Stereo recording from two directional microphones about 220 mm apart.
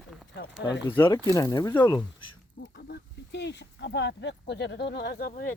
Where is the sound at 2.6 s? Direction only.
50° left (ahead or behind).